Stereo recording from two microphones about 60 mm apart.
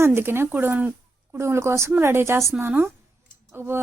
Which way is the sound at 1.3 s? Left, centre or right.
Right.